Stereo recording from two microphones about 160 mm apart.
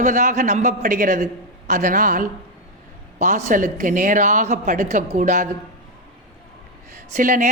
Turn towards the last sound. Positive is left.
turn(degrees=-55)  # may be behind; listen again after turning